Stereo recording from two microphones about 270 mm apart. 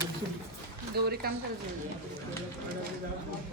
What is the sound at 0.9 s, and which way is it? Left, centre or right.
Speech, right.